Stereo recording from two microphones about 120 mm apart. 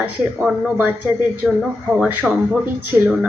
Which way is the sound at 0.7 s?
15° right (ahead or behind).